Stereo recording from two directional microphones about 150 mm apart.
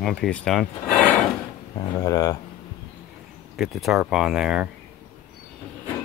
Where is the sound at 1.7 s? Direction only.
25° left (ahead or behind).